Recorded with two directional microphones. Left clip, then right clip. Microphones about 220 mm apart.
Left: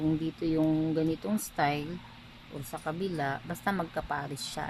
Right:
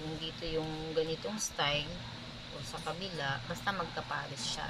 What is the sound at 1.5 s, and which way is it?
Speech, 35° left (ahead or behind).